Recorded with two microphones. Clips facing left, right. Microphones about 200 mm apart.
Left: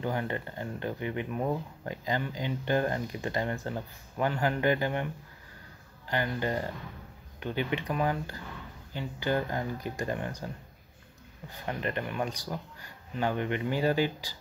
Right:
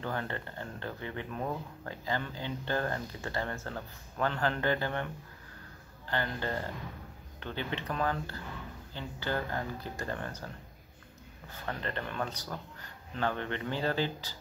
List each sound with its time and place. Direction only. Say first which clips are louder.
0.0 s speech: left 4 dB; 15° left (ahead or behind)
11.5 s speech: left 4 dB; 15° left (ahead or behind)